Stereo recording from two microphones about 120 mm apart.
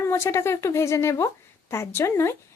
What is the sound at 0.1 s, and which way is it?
Speech, 20° left (ahead or behind).